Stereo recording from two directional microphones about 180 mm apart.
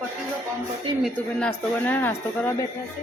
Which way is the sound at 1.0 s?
5° left (ahead or behind).